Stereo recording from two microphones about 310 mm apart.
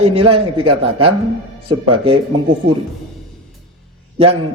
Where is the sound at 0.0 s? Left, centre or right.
Centre.